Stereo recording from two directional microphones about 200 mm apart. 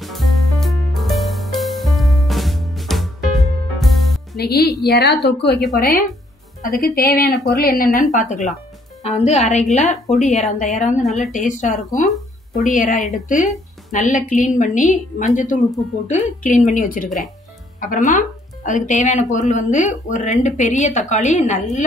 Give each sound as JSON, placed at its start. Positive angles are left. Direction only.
{"t": 0.0, "sound": "music", "side_deg": 0}
{"t": 4.4, "sound": "a woman's voice", "side_deg": 55}